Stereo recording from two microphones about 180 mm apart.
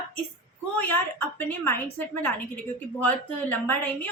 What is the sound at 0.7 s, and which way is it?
A woman's voice, 10° left (ahead or behind).